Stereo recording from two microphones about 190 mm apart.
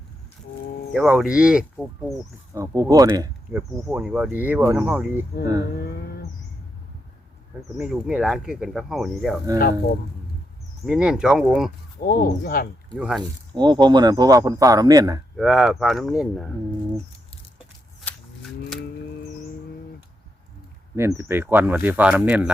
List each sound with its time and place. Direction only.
0.9 s speech: 5° right (ahead or behind)
2.6 s speech: 15° right (ahead or behind)
3.5 s speech: 5° right (ahead or behind)
7.8 s speech: 5° right (ahead or behind)
9.6 s speech: 55° left (ahead or behind)
10.8 s speech: 5° right (ahead or behind)
11.9 s speech: 50° left (ahead or behind)
13.0 s speech: 5° right (ahead or behind)
13.5 s speech: 20° right (ahead or behind)
15.4 s speech: centre (ahead or behind)
20.9 s speech: 15° right (ahead or behind)